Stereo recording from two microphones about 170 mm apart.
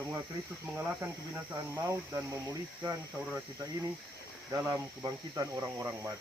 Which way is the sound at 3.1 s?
Centre (ahead or behind).